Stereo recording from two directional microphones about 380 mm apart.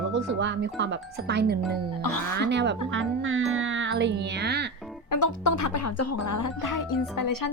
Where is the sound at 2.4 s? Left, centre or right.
Right.